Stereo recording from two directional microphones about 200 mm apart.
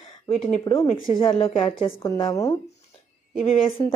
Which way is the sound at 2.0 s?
15° left (ahead or behind).